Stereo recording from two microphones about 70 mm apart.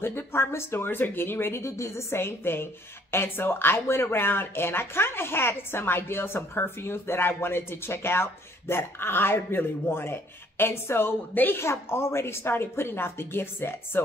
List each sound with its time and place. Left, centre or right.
0.0 s speech: left